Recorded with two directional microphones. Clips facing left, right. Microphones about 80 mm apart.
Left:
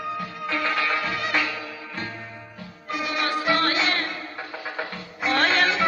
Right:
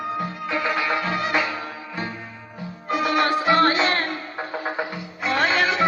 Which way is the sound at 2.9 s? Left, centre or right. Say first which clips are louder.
Right 6 dB; right.